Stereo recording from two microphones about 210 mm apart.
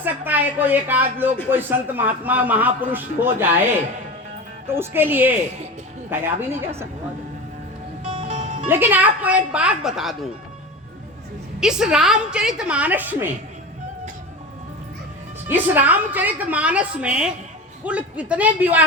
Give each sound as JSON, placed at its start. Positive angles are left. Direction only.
{"t": 0.0, "sound": "a man's voice", "side_deg": -10}
{"t": 4.7, "sound": "a man's voice", "side_deg": -10}
{"t": 8.1, "sound": "music", "side_deg": -30}
{"t": 8.6, "sound": "a man's voice", "side_deg": -10}
{"t": 11.6, "sound": "a woman's voice", "side_deg": -5}
{"t": 15.4, "sound": "a man's voice", "side_deg": -10}